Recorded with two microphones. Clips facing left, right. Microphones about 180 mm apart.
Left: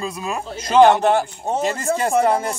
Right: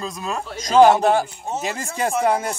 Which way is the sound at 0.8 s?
10° right (ahead or behind).